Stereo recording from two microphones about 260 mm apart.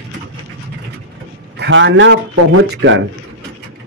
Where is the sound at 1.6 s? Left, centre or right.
Right.